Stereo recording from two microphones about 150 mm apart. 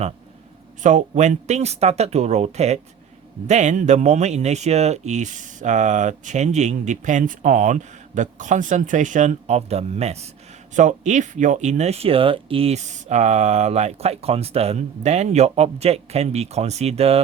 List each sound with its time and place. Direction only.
0.8 s speech: 55° right (ahead or behind)